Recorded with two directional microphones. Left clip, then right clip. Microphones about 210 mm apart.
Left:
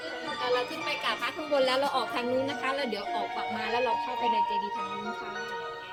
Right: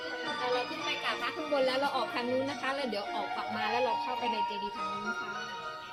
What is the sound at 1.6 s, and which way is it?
Speech, 40° left (ahead or behind).